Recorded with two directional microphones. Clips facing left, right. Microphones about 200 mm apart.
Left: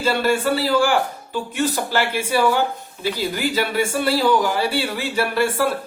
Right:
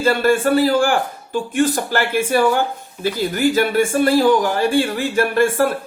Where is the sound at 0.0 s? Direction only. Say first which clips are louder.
Right 4 dB; 50° right (ahead or behind).